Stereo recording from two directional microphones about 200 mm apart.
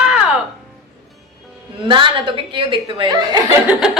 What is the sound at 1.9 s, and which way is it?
Speech, 25° right (ahead or behind).